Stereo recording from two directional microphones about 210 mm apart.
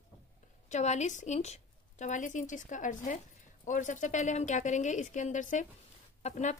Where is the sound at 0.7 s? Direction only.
35° left (ahead or behind).